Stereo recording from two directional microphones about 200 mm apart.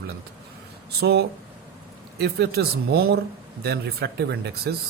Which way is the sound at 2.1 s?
55° right (ahead or behind).